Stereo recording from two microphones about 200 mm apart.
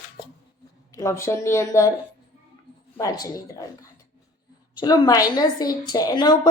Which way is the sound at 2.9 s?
20° left (ahead or behind).